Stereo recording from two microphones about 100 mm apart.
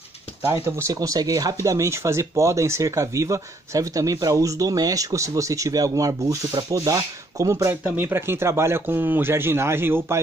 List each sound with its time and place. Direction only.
0.7 s speech: 30° right (ahead or behind)